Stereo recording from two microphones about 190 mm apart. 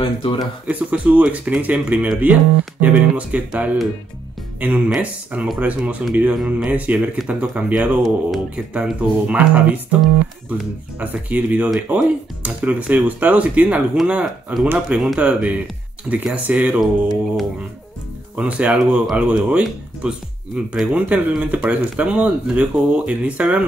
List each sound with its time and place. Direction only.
0.0 s speech: 25° left (ahead or behind)
0.7 s speech: 10° right (ahead or behind)
11.0 s speech: 10° right (ahead or behind)
18.3 s speech: 5° right (ahead or behind)